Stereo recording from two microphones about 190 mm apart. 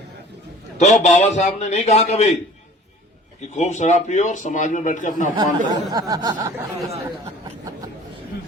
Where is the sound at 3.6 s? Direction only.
40° left (ahead or behind).